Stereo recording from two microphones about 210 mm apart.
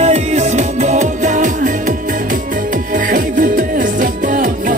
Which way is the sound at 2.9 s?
40° right (ahead or behind).